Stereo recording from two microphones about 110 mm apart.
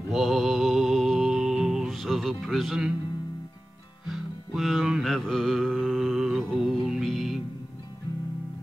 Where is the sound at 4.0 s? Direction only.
Centre (ahead or behind).